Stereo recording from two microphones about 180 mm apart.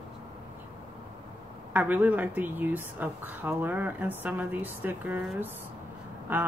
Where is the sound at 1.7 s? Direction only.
10° right (ahead or behind).